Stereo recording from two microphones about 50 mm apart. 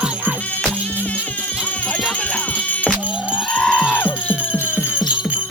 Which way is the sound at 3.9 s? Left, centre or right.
Left.